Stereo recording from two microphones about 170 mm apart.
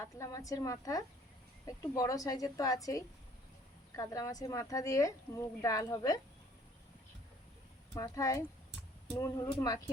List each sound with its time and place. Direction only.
0.0 s a woman's voice: 20° left (ahead or behind)
7.9 s a woman's voice: 20° left (ahead or behind)